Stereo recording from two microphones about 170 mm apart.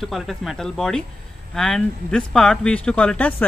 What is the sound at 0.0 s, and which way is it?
Speech, centre (ahead or behind).